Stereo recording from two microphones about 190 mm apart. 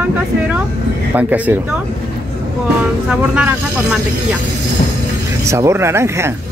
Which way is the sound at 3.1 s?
5° right (ahead or behind).